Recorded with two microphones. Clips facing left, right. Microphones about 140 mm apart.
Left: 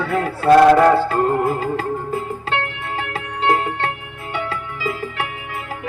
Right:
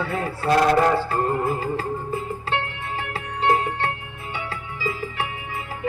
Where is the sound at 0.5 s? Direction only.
55° left (ahead or behind).